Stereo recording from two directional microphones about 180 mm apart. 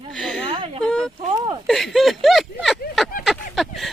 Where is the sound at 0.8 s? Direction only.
5° left (ahead or behind).